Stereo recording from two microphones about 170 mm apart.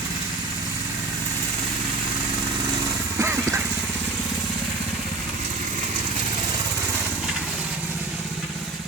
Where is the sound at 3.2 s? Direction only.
15° right (ahead or behind).